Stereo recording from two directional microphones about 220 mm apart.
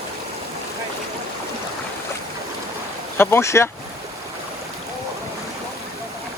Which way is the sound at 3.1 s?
10° left (ahead or behind).